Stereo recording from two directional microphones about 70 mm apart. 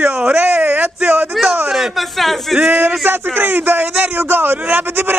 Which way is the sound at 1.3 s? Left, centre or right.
Centre.